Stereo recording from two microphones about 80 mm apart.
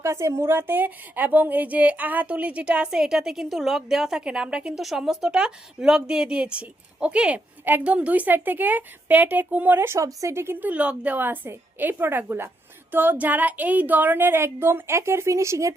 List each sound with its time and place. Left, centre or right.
0.0 s a woman's voice: right